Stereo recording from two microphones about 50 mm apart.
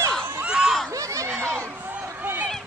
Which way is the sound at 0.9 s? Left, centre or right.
Right.